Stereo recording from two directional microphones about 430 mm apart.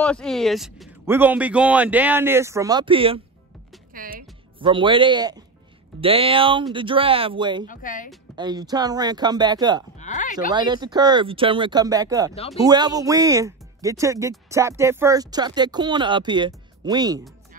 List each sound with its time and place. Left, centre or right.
0.0 s speech: centre
7.6 s speech: centre
8.1 s speech: centre
9.9 s a sound: centre
10.5 s speech: centre